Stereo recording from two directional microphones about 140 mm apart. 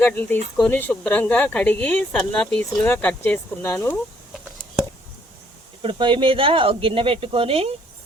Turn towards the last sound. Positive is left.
turn(degrees=-45)  # may be behind; listen again after turning